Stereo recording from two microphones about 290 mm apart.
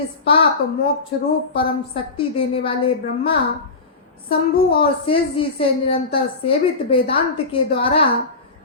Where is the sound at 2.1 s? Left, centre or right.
Centre.